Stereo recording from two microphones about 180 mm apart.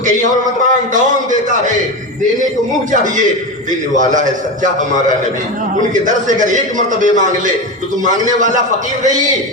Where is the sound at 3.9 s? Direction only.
45° right (ahead or behind).